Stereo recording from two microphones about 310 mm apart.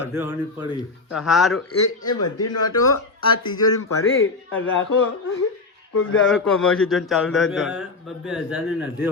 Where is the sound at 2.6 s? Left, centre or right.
Centre.